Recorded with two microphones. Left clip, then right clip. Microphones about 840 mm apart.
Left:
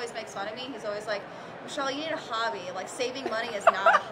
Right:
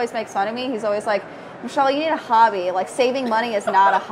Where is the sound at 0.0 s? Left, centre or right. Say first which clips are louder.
Right 12 dB; right.